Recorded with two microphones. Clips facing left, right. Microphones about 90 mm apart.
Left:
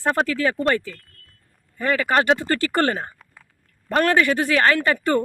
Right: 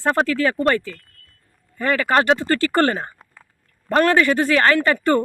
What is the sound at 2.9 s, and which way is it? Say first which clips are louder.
Speech: right 1 dB; 25° right (ahead or behind).